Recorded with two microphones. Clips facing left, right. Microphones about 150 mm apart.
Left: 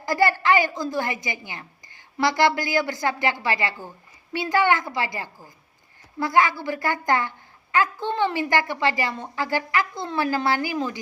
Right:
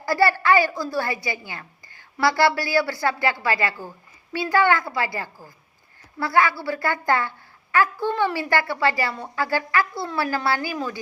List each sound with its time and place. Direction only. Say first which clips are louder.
0.0 s a woman's voice: right 1 dB; 20° left (ahead or behind)